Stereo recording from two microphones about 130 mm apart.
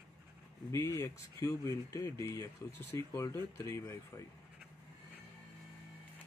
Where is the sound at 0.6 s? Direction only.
20° left (ahead or behind).